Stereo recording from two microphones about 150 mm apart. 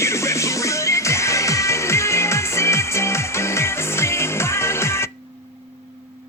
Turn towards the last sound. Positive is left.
turn(degrees=15)  # may be behind; listen again after turning